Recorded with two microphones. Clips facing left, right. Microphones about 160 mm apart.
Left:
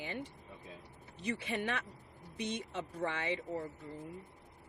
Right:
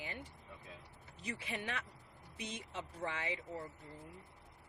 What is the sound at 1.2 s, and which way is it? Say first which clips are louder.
Speech: left 6 dB; 60° left (ahead or behind).